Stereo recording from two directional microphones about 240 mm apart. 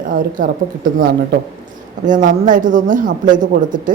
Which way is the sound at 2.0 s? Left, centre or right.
Right.